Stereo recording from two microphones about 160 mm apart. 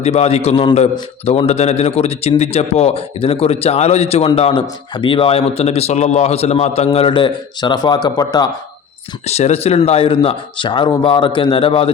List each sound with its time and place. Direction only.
0.0 s speech: 40° left (ahead or behind); by 8.4 s 25° left (ahead or behind)
9.2 s speech: 40° left (ahead or behind)